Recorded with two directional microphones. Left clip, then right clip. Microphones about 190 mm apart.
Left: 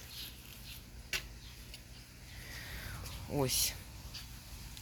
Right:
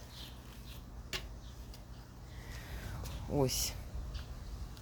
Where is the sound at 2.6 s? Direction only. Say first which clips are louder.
Left 4 dB; centre (ahead or behind).